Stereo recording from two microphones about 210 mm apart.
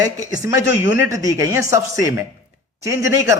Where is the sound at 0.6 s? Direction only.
65° left (ahead or behind).